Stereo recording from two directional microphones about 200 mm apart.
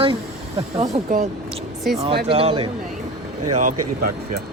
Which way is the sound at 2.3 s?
30° right (ahead or behind).